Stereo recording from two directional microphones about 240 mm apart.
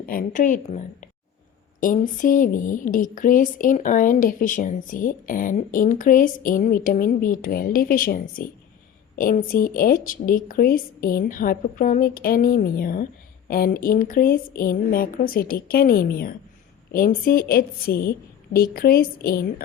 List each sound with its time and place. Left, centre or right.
0.0 s a woman's voice: left